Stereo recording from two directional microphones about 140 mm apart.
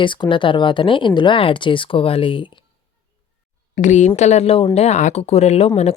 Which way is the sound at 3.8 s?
60° left (ahead or behind).